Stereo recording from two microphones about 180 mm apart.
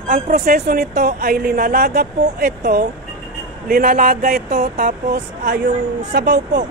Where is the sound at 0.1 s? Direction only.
45° right (ahead or behind).